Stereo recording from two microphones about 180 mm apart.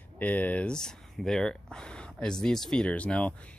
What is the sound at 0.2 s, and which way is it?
Speech, 10° left (ahead or behind).